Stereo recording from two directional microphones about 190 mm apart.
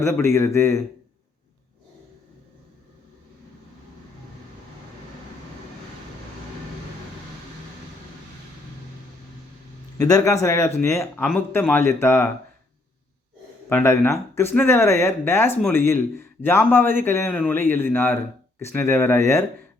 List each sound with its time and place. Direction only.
0.0 s speech: 15° left (ahead or behind)
10.0 s speech: 20° left (ahead or behind)
13.7 s speech: 10° left (ahead or behind)